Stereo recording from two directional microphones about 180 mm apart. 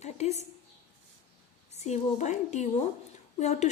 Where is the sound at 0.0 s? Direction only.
40° left (ahead or behind).